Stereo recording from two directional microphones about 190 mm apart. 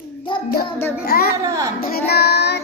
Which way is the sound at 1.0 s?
55° left (ahead or behind).